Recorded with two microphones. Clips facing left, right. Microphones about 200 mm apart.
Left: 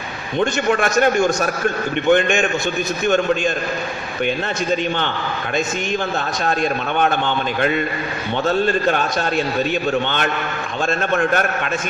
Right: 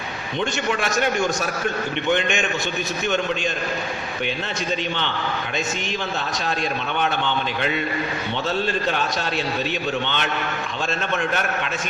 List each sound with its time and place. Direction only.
0.3 s a man's voice: 50° left (ahead or behind)
6.4 s a man's voice: 50° left (ahead or behind)
10.8 s a man's voice: 50° left (ahead or behind)